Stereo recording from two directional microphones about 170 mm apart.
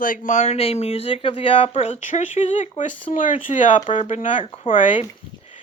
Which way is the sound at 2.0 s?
45° left (ahead or behind).